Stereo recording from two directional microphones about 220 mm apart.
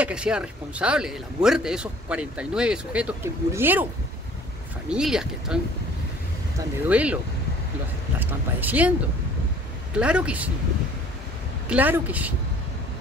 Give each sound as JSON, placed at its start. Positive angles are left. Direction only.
{"t": 0.0, "sound": "speech", "side_deg": -5}
{"t": 4.8, "sound": "speech", "side_deg": -5}
{"t": 6.9, "sound": "speech", "side_deg": -5}
{"t": 8.2, "sound": "speech", "side_deg": -10}
{"t": 9.9, "sound": "speech", "side_deg": -5}
{"t": 11.7, "sound": "speech", "side_deg": -5}